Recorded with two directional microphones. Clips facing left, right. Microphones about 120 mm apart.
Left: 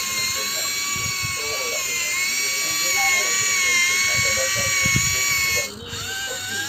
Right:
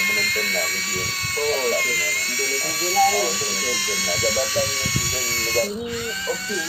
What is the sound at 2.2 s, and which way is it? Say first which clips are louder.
Speech: right 6 dB; 50° right (ahead or behind).